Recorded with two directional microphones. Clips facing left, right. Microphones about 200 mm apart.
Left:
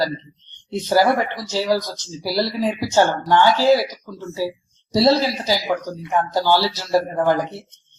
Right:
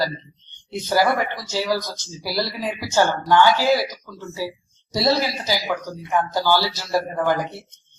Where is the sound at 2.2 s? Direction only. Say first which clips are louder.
Left 5 dB; 30° left (ahead or behind).